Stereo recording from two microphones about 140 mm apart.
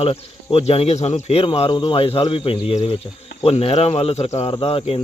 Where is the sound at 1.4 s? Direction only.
40° left (ahead or behind).